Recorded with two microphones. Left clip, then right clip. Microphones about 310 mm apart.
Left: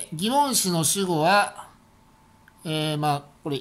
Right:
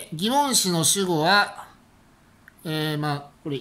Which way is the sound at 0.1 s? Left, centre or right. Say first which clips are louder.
Right 1 dB; centre.